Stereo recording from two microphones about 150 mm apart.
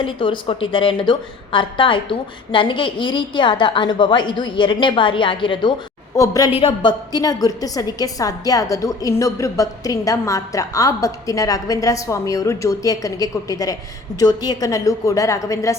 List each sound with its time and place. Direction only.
0.0 s a woman's voice: 35° left (ahead or behind)
6.1 s a woman's voice: 20° left (ahead or behind)
6.5 s a woman's voice: 35° left (ahead or behind); by 15.7 s 20° left (ahead or behind)